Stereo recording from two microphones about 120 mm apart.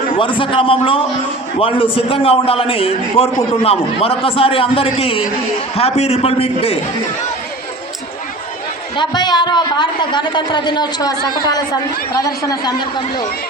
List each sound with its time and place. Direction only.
0.2 s a man's voice: 45° left (ahead or behind)
9.0 s a woman's voice: 40° left (ahead or behind)